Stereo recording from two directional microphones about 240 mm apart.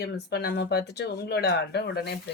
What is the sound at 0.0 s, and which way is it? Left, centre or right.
Speech, left.